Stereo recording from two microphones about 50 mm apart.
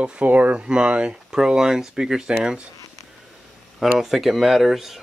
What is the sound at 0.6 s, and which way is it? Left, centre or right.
Speech, centre.